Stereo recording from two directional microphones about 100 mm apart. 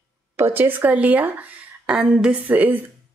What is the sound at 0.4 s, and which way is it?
Speech, 20° right (ahead or behind).